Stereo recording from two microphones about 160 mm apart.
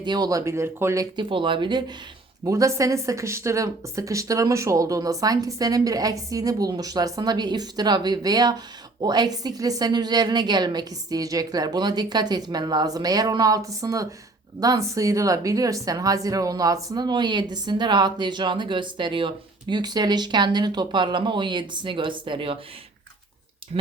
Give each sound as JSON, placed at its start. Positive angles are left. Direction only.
{"t": 0.0, "sound": "speech", "side_deg": -25}
{"t": 1.1, "sound": "speech", "side_deg": -30}